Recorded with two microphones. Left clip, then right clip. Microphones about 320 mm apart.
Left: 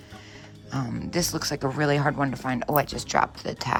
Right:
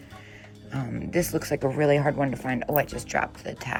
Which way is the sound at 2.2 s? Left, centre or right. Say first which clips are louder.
Left 1 dB; centre.